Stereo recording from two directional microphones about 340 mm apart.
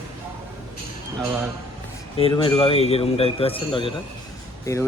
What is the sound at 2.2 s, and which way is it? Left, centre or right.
A man's voice, centre.